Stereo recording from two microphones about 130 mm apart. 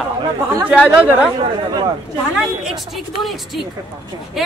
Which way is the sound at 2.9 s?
Centre (ahead or behind).